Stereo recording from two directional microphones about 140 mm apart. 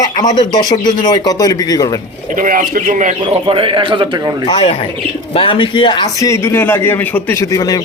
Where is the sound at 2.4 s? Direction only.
75° right (ahead or behind).